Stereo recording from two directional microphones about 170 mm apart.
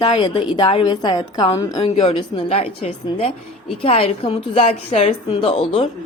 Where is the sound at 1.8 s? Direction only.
35° left (ahead or behind).